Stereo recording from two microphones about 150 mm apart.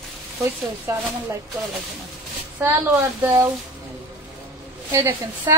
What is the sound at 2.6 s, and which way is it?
Speech, 15° right (ahead or behind).